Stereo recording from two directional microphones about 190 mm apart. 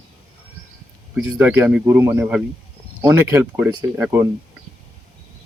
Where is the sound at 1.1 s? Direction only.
5° right (ahead or behind).